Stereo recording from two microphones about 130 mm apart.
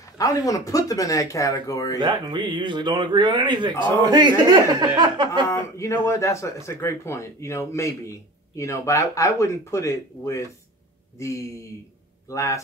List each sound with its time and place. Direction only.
0.2 s speech: 25° left (ahead or behind)
2.0 s speech: 35° right (ahead or behind)
5.5 s speech: 20° left (ahead or behind)